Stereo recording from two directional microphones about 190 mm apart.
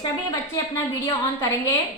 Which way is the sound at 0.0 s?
15° left (ahead or behind).